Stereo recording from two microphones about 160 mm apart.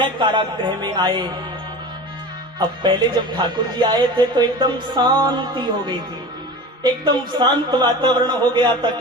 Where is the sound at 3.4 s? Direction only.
30° right (ahead or behind).